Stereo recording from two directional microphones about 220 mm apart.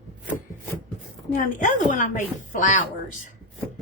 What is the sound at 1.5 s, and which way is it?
A woman's voice, 35° left (ahead or behind).